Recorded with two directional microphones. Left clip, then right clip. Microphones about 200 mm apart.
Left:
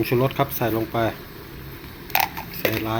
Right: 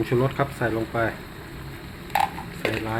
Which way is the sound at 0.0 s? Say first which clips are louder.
Left 2 dB; 15° left (ahead or behind).